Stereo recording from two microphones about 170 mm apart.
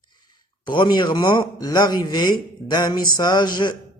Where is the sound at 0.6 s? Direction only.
25° left (ahead or behind).